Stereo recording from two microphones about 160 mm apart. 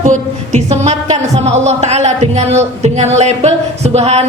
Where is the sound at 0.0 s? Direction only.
50° right (ahead or behind).